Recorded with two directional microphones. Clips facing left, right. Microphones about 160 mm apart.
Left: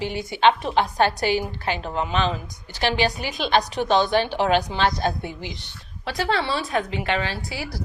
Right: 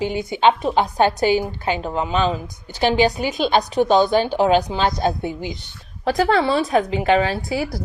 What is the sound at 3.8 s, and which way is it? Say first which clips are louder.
Speech: right 7 dB; 40° right (ahead or behind).